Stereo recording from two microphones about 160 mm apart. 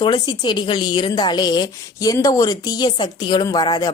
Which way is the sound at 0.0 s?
30° left (ahead or behind).